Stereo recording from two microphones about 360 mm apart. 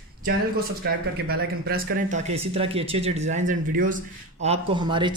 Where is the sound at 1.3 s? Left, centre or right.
Right.